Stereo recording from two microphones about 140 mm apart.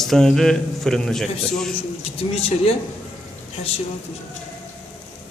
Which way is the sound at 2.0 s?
45° left (ahead or behind).